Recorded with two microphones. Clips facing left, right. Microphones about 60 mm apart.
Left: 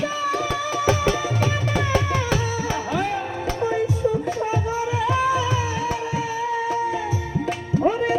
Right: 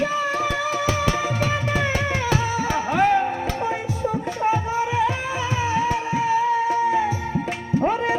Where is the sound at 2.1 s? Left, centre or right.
Right.